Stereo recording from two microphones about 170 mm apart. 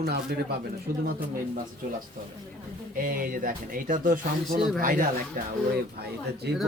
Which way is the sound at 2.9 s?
55° right (ahead or behind).